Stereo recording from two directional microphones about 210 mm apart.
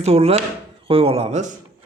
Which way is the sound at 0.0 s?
30° right (ahead or behind).